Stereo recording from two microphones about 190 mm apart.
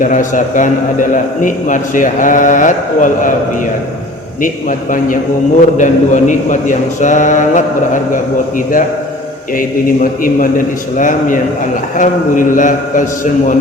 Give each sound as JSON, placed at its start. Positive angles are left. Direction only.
{"t": 0.0, "sound": "a man's voice", "side_deg": 40}
{"t": 4.4, "sound": "a man's voice", "side_deg": 45}